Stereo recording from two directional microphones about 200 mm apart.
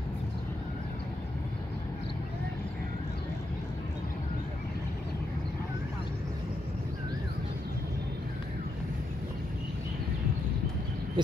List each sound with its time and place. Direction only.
11.2 s owl: 25° right (ahead or behind)